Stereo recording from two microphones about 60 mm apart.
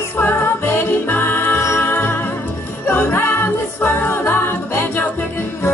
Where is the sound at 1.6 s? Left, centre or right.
Left.